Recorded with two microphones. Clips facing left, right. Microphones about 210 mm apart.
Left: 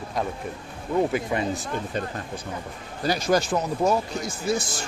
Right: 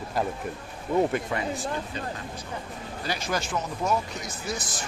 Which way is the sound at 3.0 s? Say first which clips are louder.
Left 8 dB; 40° left (ahead or behind).